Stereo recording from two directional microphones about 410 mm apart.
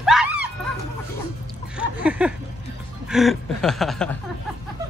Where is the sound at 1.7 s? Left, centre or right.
Centre.